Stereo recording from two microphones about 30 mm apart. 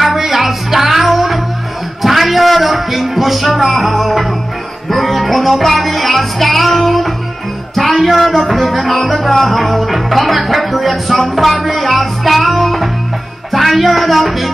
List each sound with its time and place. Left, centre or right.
0.0 s music: centre